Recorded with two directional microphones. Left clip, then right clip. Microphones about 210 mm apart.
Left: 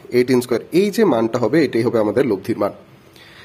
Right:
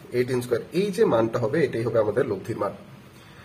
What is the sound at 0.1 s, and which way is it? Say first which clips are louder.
Speech: left 8 dB; 50° left (ahead or behind).